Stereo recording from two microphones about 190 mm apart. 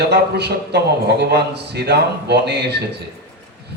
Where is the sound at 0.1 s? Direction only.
60° right (ahead or behind).